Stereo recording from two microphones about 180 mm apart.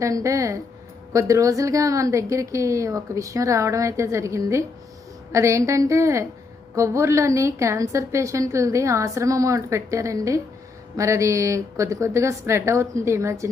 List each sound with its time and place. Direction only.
0.0 s a woman's voice: 15° right (ahead or behind)